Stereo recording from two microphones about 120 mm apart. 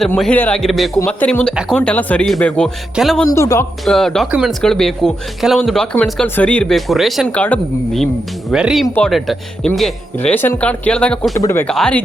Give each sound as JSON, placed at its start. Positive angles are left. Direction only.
{"t": 0.3, "sound": "speech", "side_deg": 15}
{"t": 0.6, "sound": "speech", "side_deg": 0}
{"t": 1.0, "sound": "speech", "side_deg": 10}
{"t": 3.2, "sound": "speech", "side_deg": 25}
{"t": 3.8, "sound": "speech", "side_deg": 5}
{"t": 7.3, "sound": "speech", "side_deg": 15}
{"t": 7.9, "sound": "speech", "side_deg": 0}
{"t": 10.2, "sound": "speech", "side_deg": 15}
{"t": 11.3, "sound": "speech", "side_deg": 25}
{"t": 11.6, "sound": "speech", "side_deg": 5}